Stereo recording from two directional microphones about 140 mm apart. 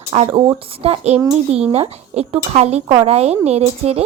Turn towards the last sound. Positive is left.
turn(degrees=-50)  # may be behind; listen again after turning